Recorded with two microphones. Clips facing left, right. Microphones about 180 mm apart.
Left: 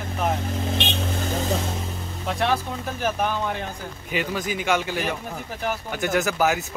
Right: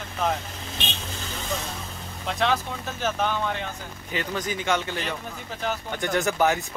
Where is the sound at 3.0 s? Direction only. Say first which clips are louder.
Left 1 dB; 10° left (ahead or behind).